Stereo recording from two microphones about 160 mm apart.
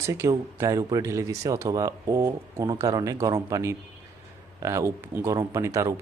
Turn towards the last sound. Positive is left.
turn(degrees=-20)  # may be behind; listen again after turning